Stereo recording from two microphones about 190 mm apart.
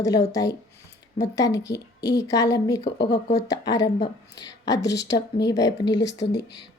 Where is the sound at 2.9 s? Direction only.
60° left (ahead or behind).